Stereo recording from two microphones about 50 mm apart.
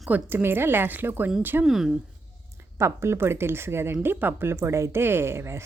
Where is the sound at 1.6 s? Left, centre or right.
Centre.